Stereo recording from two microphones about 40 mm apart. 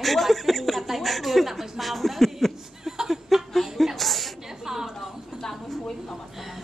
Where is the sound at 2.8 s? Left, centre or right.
Centre.